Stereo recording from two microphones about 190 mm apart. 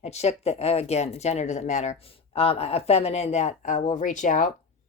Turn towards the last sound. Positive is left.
turn(degrees=40)  # may be behind; listen again after turning